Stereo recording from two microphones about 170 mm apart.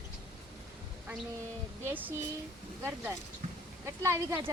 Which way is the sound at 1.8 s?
10° right (ahead or behind).